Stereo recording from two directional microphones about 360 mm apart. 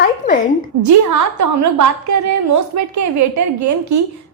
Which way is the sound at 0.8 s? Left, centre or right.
Right.